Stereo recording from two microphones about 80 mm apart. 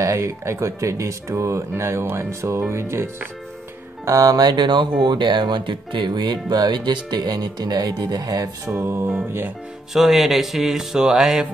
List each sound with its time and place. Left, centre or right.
0.0 s speech: right
4.0 s speech: right
9.9 s speech: centre